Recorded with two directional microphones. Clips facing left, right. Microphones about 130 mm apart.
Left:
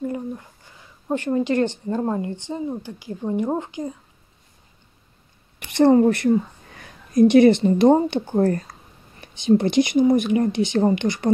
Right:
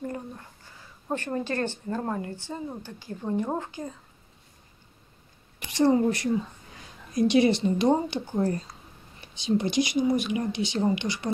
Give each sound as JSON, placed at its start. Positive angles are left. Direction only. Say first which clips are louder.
{"t": 1.0, "sound": "speech", "louder": "left 8 dB", "side_deg": 15}
{"t": 5.7, "sound": "a woman's voice", "louder": "left 7 dB", "side_deg": 60}